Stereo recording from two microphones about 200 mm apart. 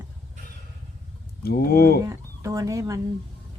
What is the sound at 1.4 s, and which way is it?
Speech, 50° left (ahead or behind).